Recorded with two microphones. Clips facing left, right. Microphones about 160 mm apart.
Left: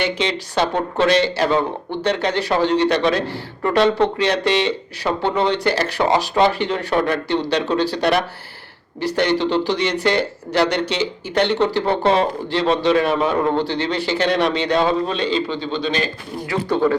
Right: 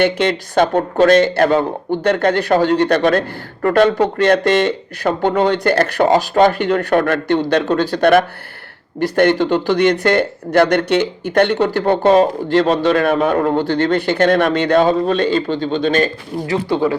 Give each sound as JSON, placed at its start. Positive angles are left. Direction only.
{"t": 0.0, "sound": "a man's voice", "side_deg": -55}